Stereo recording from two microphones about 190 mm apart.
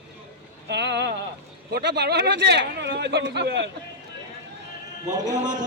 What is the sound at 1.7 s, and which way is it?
A man's voice, 60° right (ahead or behind).